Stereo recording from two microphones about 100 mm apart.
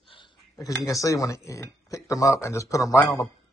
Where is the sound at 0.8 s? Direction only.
30° left (ahead or behind).